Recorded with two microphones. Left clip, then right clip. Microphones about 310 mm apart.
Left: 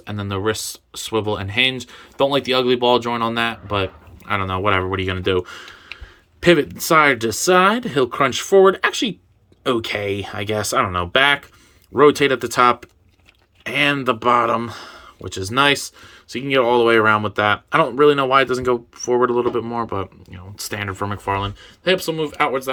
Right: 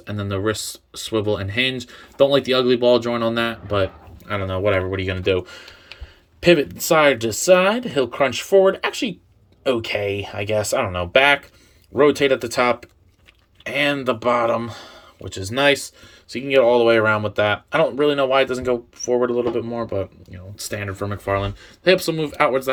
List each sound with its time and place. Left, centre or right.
0.0 s speech: centre
6.8 s speech: left
7.3 s speech: centre